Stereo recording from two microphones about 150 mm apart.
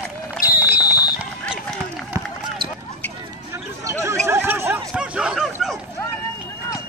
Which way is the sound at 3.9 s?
20° right (ahead or behind).